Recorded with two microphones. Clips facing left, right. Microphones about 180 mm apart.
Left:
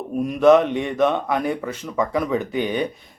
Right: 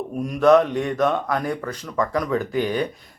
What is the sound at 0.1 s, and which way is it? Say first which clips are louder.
A man's voice: left 2 dB; centre (ahead or behind).